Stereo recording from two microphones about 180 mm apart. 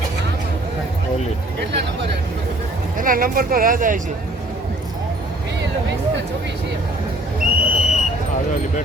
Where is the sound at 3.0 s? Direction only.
50° right (ahead or behind).